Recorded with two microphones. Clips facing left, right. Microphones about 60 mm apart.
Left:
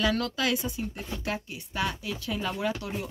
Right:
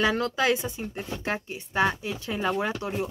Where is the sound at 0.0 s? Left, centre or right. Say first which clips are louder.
Right 3 dB; right.